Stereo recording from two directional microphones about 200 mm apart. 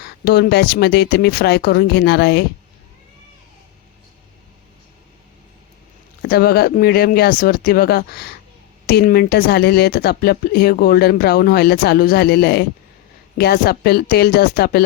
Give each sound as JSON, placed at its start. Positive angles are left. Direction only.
{"t": 0.0, "sound": "speech", "side_deg": 55}
{"t": 6.2, "sound": "speech", "side_deg": 50}